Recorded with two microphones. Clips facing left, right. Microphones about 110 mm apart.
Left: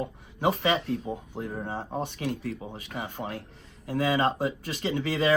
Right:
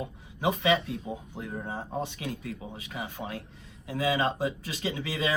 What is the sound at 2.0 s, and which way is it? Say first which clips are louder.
Speech: left 3 dB; 50° left (ahead or behind).